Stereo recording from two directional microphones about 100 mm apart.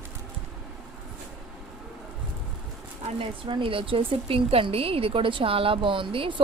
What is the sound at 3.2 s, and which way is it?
A woman's voice, 65° right (ahead or behind).